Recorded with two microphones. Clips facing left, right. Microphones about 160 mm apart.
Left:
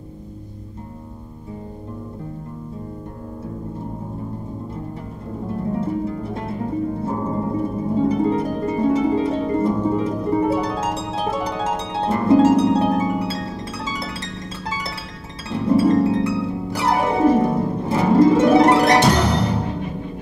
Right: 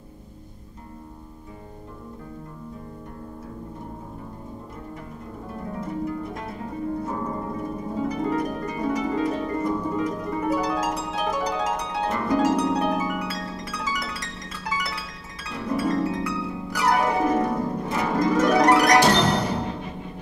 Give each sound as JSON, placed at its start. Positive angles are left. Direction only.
{"t": 5.7, "sound": "music", "side_deg": 30}
{"t": 7.0, "sound": "harp", "side_deg": 25}
{"t": 15.5, "sound": "harp", "side_deg": 30}